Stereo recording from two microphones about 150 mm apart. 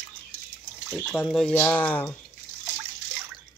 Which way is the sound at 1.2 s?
Centre (ahead or behind).